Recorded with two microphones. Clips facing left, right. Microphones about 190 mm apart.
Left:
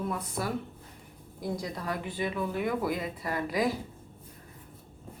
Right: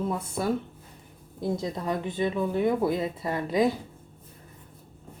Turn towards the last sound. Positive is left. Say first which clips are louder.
# right 5 dB
turn(degrees=-25)  # may be behind; listen again after turning